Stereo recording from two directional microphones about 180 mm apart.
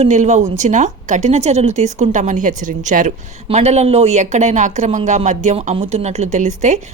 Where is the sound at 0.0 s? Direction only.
40° right (ahead or behind).